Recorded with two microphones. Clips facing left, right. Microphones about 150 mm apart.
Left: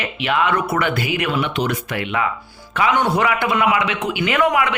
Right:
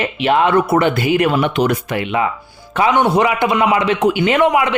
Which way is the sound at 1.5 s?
50° right (ahead or behind).